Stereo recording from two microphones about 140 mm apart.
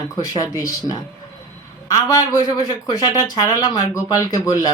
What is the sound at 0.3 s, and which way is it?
Speech, 25° left (ahead or behind).